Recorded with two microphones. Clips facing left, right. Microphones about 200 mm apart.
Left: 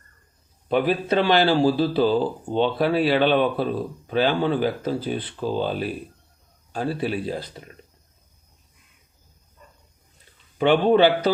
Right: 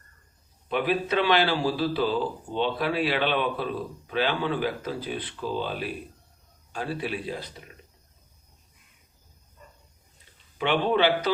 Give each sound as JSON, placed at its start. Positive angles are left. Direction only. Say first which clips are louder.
{"t": 0.7, "sound": "speech", "louder": "left 5 dB", "side_deg": 35}
{"t": 10.6, "sound": "speech", "louder": "left 7 dB", "side_deg": 40}